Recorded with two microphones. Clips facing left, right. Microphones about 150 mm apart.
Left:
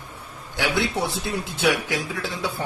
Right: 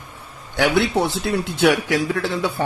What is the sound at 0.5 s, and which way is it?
A man's voice, 60° right (ahead or behind).